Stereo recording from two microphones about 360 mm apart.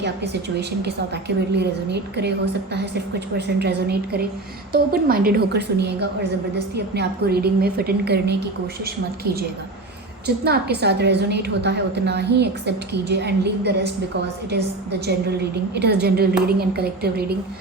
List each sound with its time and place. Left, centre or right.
0.9 s a woman's voice: right
10.2 s a woman's voice: right
15.7 s a woman's voice: right